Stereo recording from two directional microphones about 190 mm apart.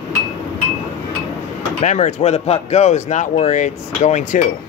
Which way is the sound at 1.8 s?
40° left (ahead or behind).